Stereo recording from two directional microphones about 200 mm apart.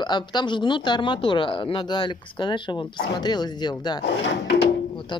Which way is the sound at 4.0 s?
60° left (ahead or behind).